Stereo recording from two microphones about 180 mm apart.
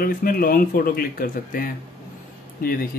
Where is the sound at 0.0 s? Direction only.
55° left (ahead or behind).